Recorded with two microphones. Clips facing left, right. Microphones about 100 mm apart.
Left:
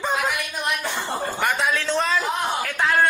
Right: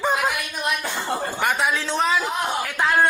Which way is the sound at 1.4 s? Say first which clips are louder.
Even; 10° right (ahead or behind).